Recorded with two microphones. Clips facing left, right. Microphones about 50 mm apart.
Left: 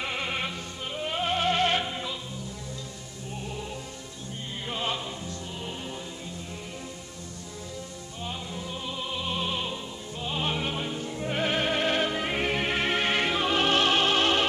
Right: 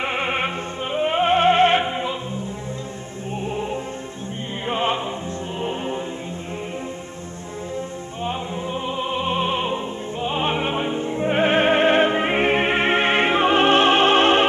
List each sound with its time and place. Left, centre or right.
0.0 s music: right
3.4 s music: right
4.6 s opera: right
5.6 s music: right
8.8 s music: right